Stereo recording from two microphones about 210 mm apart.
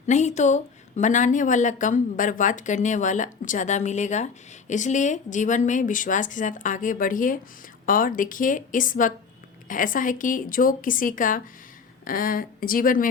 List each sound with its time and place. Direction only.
0.1 s speech: 35° left (ahead or behind)